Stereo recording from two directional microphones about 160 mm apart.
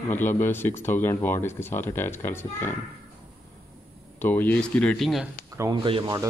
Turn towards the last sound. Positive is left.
turn(degrees=-25)  # may be behind; listen again after turning